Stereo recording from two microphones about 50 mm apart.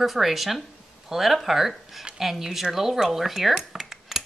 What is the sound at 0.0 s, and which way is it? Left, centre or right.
Speech, centre.